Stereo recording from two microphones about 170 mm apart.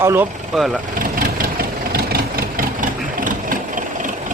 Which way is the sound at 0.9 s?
55° right (ahead or behind).